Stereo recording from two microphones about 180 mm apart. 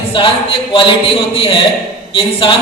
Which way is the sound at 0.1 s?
30° left (ahead or behind).